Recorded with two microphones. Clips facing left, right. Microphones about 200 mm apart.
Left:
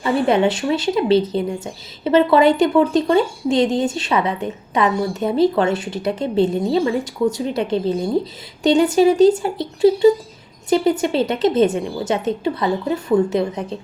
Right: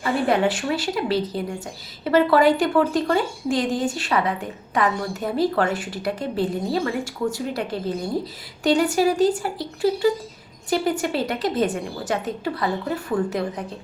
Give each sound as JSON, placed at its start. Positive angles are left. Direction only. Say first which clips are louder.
{"t": 0.0, "sound": "speech", "louder": "left 4 dB", "side_deg": 20}